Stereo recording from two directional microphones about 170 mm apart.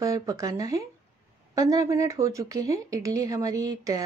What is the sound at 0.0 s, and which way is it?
A woman's voice, 20° right (ahead or behind).